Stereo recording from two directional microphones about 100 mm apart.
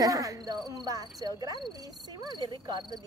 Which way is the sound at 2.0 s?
45° right (ahead or behind).